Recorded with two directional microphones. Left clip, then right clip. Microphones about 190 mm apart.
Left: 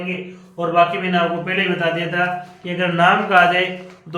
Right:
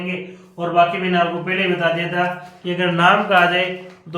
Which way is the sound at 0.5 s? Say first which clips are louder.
Even; 30° left (ahead or behind).